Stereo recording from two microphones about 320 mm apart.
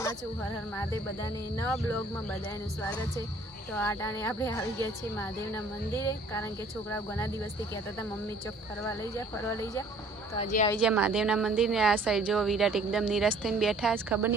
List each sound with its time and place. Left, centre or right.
0.7 s a woman's voice: centre
3.7 s a woman's voice: centre
8.8 s a woman's voice: centre
10.3 s a woman's voice: left
10.8 s a woman's voice: centre